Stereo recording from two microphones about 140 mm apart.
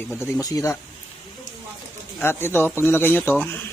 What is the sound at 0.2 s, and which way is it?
Speech, 25° left (ahead or behind).